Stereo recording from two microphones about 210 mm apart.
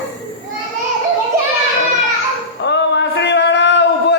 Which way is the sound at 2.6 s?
55° left (ahead or behind).